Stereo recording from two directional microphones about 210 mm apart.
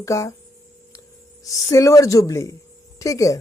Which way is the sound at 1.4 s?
15° left (ahead or behind).